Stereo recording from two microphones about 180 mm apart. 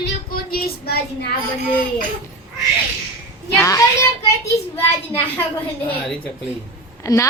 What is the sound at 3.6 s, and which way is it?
Speech, 15° left (ahead or behind).